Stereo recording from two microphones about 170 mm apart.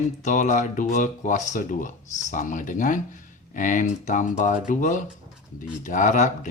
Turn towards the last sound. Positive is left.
turn(degrees=45)  # may be behind; listen again after turning